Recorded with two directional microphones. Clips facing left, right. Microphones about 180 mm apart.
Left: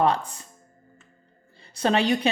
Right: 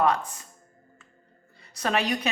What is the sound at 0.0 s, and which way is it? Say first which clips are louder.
Speech: left 1 dB; 30° left (ahead or behind).